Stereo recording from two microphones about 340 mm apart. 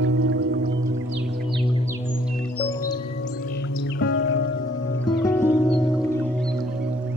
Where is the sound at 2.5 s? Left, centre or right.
Centre.